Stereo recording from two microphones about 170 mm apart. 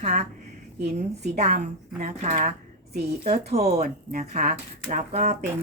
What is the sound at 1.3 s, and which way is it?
A woman's voice, 40° right (ahead or behind).